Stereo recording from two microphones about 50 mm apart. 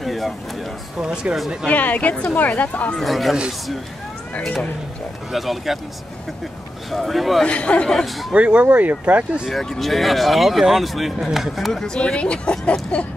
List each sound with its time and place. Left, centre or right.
0.0 s a sound: centre
1.0 s speech: centre
1.7 s speech: left
3.0 s speech: centre
5.3 s speech: centre
6.9 s speech: centre
7.4 s speech: left
7.9 s speech: centre
8.3 s speech: right
8.6 s speech: right
9.5 s speech: centre
11.8 s speech: centre